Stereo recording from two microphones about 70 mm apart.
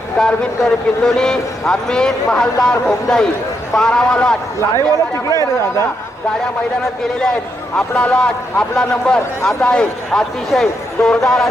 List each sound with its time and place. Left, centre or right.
0.2 s speech: centre
4.7 s speech: left
7.8 s speech: centre